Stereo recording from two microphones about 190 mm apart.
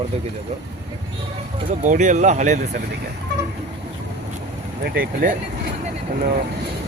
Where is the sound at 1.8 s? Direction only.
40° right (ahead or behind).